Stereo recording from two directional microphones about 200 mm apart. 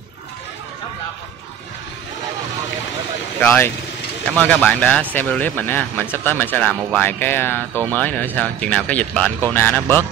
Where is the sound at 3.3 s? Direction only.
10° left (ahead or behind).